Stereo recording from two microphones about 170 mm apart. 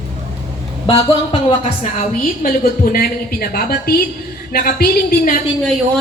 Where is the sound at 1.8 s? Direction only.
55° left (ahead or behind).